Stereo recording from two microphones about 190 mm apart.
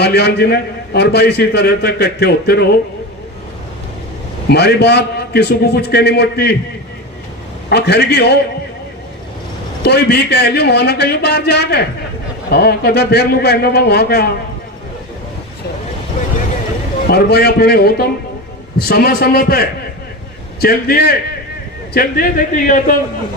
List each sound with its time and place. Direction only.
0.0 s a man's voice: 60° left (ahead or behind)
4.4 s a man's voice: 60° left (ahead or behind)
7.7 s a man's voice: 60° left (ahead or behind)
9.8 s a man's voice: 60° left (ahead or behind)
17.1 s a man's voice: 55° left (ahead or behind)